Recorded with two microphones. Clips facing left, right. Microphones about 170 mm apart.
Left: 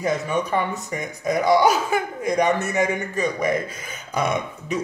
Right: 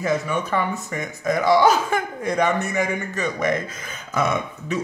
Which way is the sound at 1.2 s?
15° left (ahead or behind).